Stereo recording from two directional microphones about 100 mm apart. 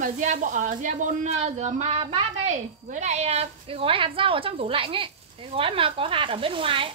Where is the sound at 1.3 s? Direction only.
90° right; by 2.2 s 70° right (ahead or behind).